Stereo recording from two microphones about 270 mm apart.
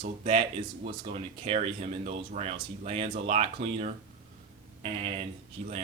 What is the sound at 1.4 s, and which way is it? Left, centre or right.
Speech, right.